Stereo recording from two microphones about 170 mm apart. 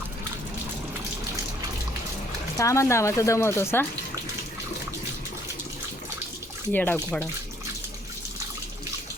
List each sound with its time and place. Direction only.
2.6 s speech: 15° left (ahead or behind)
6.7 s speech: 10° left (ahead or behind)